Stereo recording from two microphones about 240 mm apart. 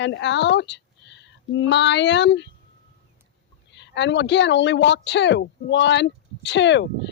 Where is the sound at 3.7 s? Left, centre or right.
Left.